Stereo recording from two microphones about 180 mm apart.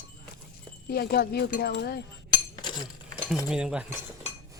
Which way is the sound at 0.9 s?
60° left (ahead or behind).